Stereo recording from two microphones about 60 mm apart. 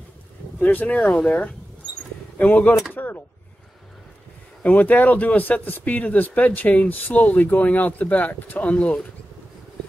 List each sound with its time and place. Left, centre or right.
0.6 s speech: left
2.9 s a sound: left
4.6 s speech: left